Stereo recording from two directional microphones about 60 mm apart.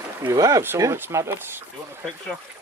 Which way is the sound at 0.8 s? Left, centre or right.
Right.